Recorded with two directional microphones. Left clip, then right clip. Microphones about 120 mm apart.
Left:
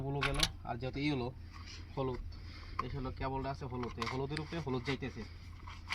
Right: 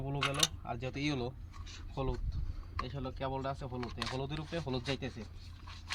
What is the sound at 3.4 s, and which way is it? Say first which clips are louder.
Speech: right 2 dB; 10° right (ahead or behind).